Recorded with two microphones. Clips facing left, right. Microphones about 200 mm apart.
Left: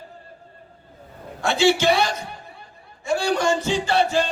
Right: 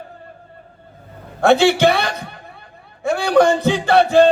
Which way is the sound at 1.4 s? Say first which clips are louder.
Right 6 dB; 60° right (ahead or behind).